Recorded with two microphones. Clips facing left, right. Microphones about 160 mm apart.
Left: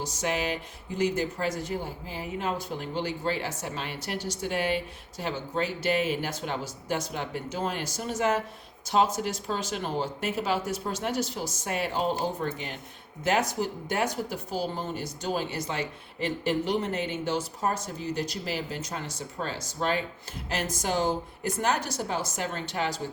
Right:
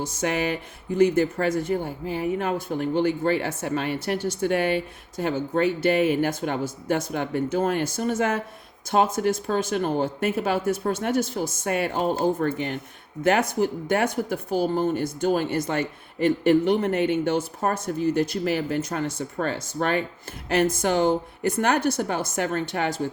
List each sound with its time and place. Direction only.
0.0 s speech: 55° right (ahead or behind)